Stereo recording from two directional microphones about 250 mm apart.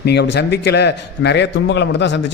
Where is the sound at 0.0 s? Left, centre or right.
Left.